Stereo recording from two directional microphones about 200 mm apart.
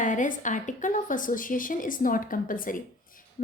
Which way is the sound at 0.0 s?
40° left (ahead or behind).